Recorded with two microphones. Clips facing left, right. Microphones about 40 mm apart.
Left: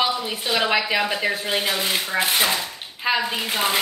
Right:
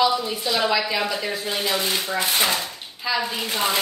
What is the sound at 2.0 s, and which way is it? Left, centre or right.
Speech, centre.